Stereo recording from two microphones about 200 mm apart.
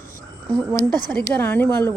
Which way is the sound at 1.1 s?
10° left (ahead or behind).